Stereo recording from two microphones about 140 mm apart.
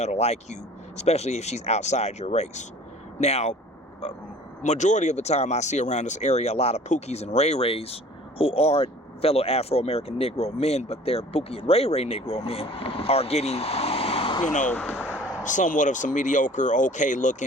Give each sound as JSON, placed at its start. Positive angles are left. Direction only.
{"t": 0.0, "sound": "speech", "side_deg": 50}
{"t": 14.7, "sound": "a sound", "side_deg": 10}
{"t": 15.4, "sound": "speech", "side_deg": 65}